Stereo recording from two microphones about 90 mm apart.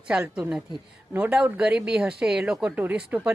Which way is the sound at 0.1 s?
10° right (ahead or behind).